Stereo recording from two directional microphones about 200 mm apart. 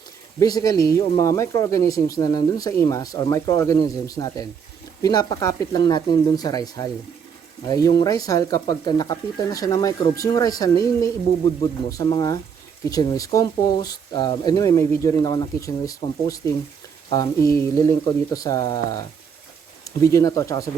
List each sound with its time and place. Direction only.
0.3 s speech: 20° left (ahead or behind)